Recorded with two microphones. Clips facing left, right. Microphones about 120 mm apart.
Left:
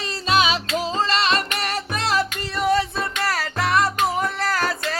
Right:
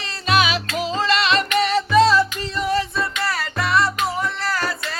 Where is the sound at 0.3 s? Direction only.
30° left (ahead or behind); by 2.6 s 65° left (ahead or behind).